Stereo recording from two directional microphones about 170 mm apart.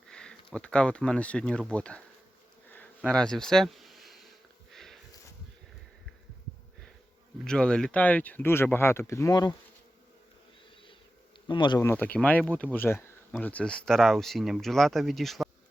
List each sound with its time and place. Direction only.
0.1 s speech: 5° left (ahead or behind)
2.7 s a sound: 5° left (ahead or behind)
4.7 s sniff: centre (ahead or behind)
7.4 s speech: 5° left (ahead or behind)
11.4 s speech: 30° left (ahead or behind)
11.8 s speech: 10° left (ahead or behind)